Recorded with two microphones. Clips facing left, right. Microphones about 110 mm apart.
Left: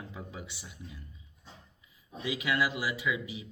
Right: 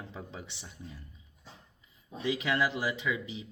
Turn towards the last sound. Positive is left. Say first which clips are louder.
# even
turn(degrees=-30)  # may be behind; listen again after turning